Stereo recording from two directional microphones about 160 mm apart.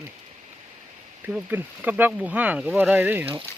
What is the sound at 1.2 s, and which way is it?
Speech, 10° right (ahead or behind).